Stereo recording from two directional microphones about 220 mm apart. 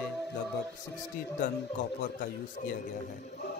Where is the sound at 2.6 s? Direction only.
40° left (ahead or behind).